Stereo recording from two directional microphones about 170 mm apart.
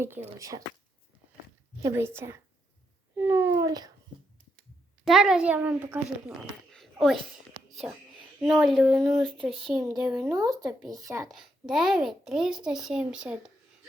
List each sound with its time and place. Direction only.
0.0 s a child's voice: 15° right (ahead or behind)
1.8 s a child's voice: 15° right (ahead or behind)
3.7 s a woman's voice: 20° right (ahead or behind)
5.0 s a child's voice: 5° right (ahead or behind)
6.7 s a sound: centre (ahead or behind)
7.8 s a child's voice: 5° right (ahead or behind)
10.3 s a woman's voice: 20° right (ahead or behind)
11.3 s a child's voice: 5° right (ahead or behind)